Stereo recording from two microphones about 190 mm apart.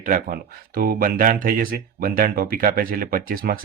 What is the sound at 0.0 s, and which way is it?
Speech, 50° right (ahead or behind).